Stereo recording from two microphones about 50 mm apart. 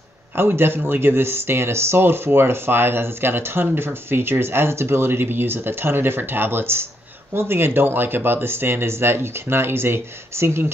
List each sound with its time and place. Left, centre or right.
0.4 s speech: right